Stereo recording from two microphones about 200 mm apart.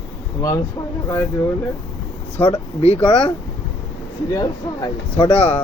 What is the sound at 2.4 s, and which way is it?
Speech, 30° left (ahead or behind).